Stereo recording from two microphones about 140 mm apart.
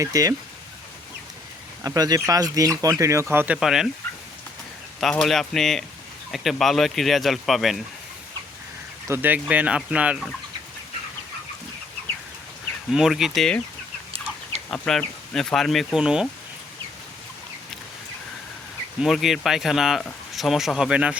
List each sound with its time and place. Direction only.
0.0 s speech: 25° right (ahead or behind)
1.8 s speech: 25° right (ahead or behind); by 3.8 s 5° right (ahead or behind)
4.9 s speech: centre (ahead or behind)
9.0 s speech: 15° right (ahead or behind)
12.9 s speech: 5° right (ahead or behind)
14.7 s speech: 5° left (ahead or behind)
19.0 s speech: centre (ahead or behind)